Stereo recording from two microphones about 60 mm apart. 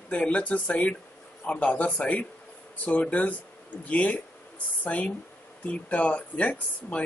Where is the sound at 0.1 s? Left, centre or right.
Left.